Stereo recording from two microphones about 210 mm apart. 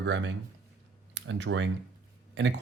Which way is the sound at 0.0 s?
55° right (ahead or behind).